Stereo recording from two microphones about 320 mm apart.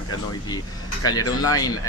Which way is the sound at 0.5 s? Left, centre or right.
Centre.